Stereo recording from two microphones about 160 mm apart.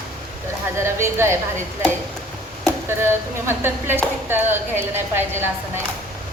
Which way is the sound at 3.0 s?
15° right (ahead or behind).